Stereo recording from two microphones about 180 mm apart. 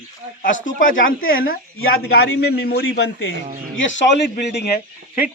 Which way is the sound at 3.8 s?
85° left.